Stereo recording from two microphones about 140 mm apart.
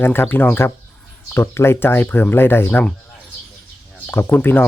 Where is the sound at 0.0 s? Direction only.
15° left (ahead or behind).